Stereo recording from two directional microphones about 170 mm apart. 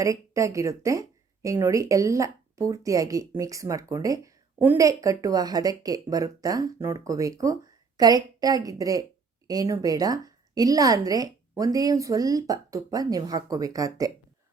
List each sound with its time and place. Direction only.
0.0 s speech: 20° right (ahead or behind)